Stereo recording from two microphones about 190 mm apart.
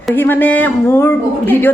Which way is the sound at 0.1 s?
10° left (ahead or behind).